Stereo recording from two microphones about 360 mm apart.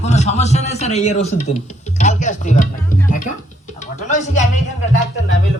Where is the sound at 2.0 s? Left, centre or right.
Centre.